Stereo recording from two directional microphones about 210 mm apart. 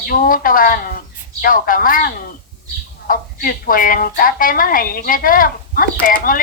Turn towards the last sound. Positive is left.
turn(degrees=40)  # may be behind; listen again after turning